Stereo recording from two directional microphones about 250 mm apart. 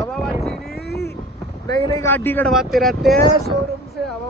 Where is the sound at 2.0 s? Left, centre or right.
Centre.